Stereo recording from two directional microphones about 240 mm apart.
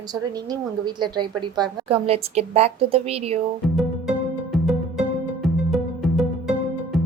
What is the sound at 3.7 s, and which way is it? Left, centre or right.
Music, centre.